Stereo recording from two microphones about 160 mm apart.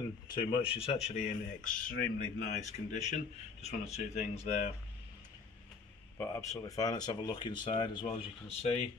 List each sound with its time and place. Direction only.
0.3 s speech: 30° left (ahead or behind)
6.1 s speech: 20° left (ahead or behind)